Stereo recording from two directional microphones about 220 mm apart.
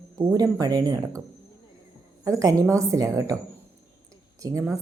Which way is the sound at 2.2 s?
15° right (ahead or behind).